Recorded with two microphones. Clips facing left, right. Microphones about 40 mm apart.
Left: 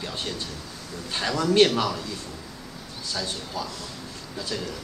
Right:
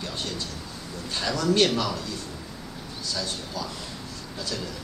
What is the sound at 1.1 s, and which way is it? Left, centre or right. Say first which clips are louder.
Speech: left 2 dB; left.